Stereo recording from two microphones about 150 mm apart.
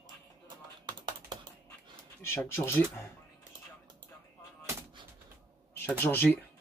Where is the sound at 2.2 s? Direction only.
15° left (ahead or behind).